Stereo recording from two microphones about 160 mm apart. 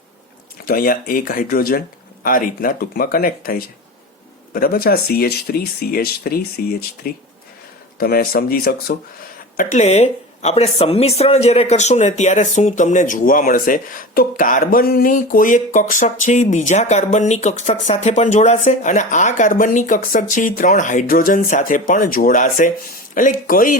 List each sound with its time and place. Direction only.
0.6 s speech: 65° left (ahead or behind)
9.6 s speech: 50° left (ahead or behind)